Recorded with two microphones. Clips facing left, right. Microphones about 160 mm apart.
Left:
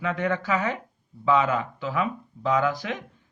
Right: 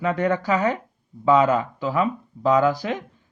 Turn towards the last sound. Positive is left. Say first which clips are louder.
# right 5 dB
turn(degrees=-35)  # may be behind; listen again after turning